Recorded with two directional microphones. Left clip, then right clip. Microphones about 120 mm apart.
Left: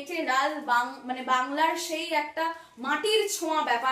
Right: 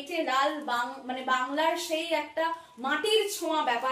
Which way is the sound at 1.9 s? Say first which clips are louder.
Left 1 dB; 45° left (ahead or behind).